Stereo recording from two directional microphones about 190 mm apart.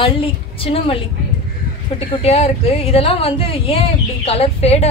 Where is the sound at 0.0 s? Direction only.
30° left (ahead or behind).